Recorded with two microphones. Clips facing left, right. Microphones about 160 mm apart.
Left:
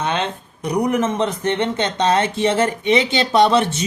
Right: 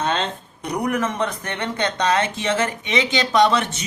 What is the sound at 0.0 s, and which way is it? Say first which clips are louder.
Speech: left 1 dB; 15° left (ahead or behind).